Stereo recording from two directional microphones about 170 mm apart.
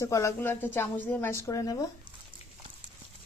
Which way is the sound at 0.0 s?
15° left (ahead or behind).